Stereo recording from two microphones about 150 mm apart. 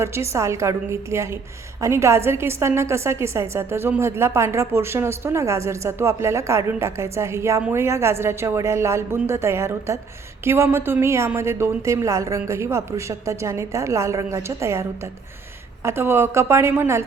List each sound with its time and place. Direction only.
0.0 s a woman's voice: 20° right (ahead or behind)